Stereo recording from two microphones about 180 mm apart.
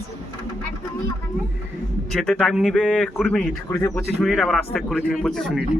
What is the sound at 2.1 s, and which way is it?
Speech, 5° left (ahead or behind).